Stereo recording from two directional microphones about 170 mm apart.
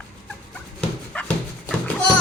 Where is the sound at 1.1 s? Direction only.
10° left (ahead or behind).